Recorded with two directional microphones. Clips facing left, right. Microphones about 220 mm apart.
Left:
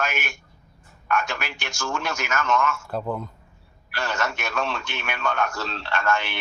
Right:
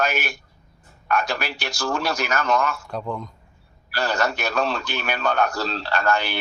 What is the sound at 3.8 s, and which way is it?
Speech, 35° right (ahead or behind).